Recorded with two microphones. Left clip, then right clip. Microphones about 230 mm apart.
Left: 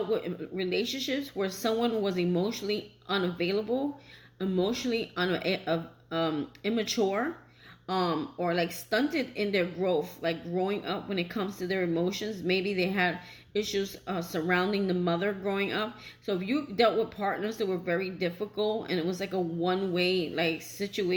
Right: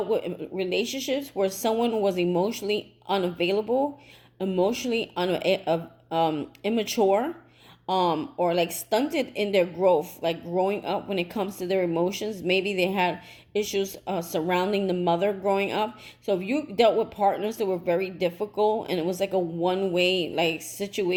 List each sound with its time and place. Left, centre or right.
0.1 s speech: centre
4.6 s speech: centre